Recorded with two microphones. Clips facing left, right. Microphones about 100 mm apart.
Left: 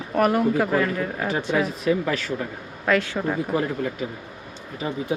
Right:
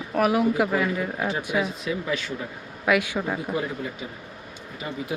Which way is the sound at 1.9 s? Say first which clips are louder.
Left 5 dB; 45° left (ahead or behind).